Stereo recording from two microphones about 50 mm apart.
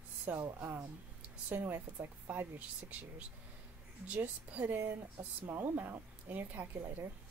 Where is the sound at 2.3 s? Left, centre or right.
Right.